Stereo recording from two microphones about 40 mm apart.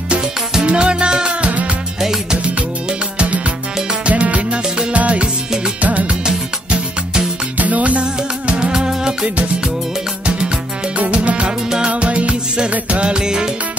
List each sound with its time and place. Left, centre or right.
0.7 s music: right
3.2 s music: right
6.2 s music: centre
7.5 s music: right; by 9.3 s centre
11.1 s music: right